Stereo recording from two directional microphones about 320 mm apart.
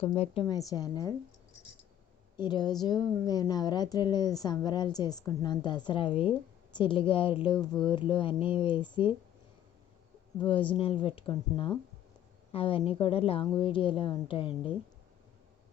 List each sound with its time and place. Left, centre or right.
0.0 s a woman's voice: centre
2.4 s a woman's voice: centre
10.3 s a woman's voice: centre